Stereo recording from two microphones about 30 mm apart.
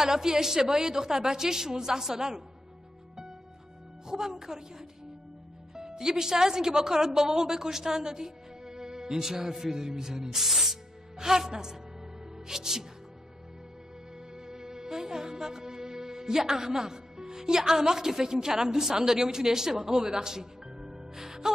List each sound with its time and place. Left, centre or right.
0.0 s a woman's voice: centre
4.1 s a woman's voice: centre
10.3 s speech: centre
11.1 s a woman's voice: centre
14.3 s music: right